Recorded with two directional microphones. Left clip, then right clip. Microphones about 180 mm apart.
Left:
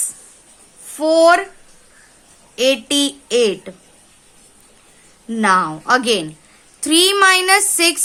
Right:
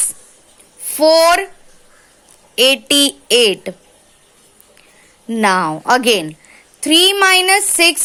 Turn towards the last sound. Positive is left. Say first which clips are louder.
# right 2 dB
turn(degrees=-25)  # may be behind; listen again after turning